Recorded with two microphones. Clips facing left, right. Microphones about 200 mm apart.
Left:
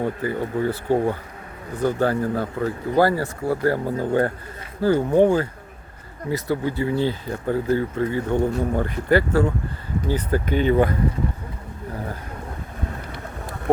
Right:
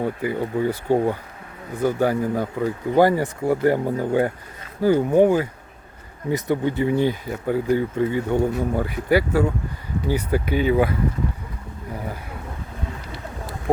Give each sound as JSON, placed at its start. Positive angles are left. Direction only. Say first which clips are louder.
{"t": 0.0, "sound": "speech", "louder": "even", "side_deg": -15}